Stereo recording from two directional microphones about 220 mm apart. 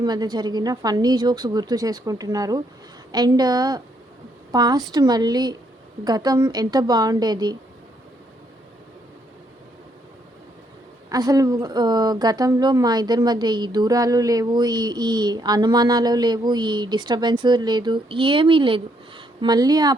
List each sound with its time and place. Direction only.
0.0 s a woman's voice: 20° right (ahead or behind)
11.1 s a woman's voice: 15° right (ahead or behind)